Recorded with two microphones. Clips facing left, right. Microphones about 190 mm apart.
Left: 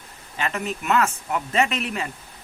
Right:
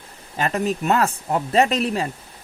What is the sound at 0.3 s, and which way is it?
Speech, 40° right (ahead or behind).